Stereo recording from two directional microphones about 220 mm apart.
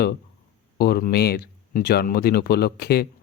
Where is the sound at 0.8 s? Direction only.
45° left (ahead or behind).